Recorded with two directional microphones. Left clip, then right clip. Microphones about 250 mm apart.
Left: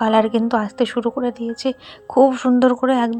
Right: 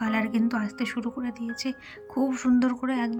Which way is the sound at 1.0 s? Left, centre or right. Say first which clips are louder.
Left 13 dB; left.